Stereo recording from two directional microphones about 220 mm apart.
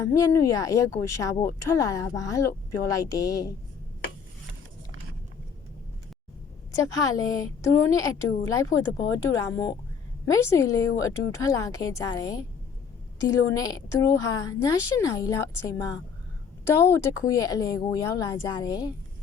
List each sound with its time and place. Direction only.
0.0 s speech: 15° left (ahead or behind)
6.8 s speech: 15° left (ahead or behind)